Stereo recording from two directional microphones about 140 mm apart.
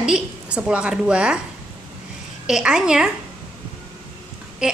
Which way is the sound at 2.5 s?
5° right (ahead or behind).